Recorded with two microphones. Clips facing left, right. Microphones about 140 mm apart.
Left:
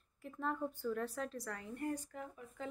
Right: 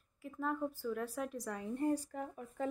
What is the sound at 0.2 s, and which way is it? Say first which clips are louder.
A woman's voice: right 2 dB; 5° right (ahead or behind).